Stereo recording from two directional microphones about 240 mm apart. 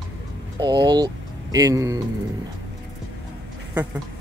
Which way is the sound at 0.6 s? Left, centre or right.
Centre.